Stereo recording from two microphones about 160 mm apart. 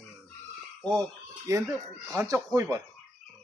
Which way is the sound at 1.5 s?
20° right (ahead or behind).